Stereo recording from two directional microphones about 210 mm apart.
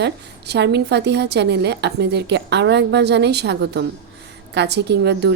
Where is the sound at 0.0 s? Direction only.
55° right (ahead or behind).